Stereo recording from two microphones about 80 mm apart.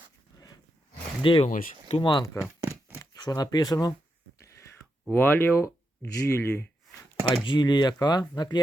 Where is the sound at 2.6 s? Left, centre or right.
Right.